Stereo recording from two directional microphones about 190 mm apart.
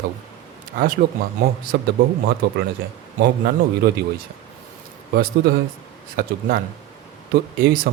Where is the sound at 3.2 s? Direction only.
60° right (ahead or behind).